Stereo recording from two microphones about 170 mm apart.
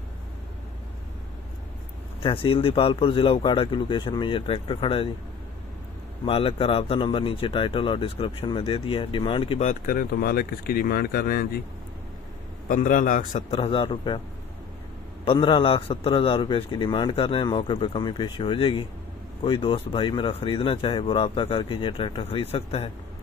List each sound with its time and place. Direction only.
2.2 s a man's voice: 30° left (ahead or behind)
6.2 s a man's voice: 35° left (ahead or behind)
9.7 s speech: 55° left (ahead or behind)
12.6 s a man's voice: 50° left (ahead or behind)
13.5 s a man's voice: 35° left (ahead or behind)
15.3 s a man's voice: 30° left (ahead or behind)